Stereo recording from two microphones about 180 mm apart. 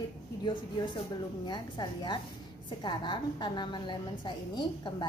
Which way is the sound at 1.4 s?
25° left (ahead or behind).